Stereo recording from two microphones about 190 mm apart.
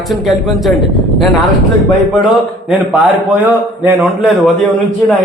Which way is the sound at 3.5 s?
5° right (ahead or behind).